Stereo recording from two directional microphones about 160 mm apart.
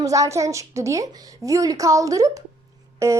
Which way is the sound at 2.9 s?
20° right (ahead or behind).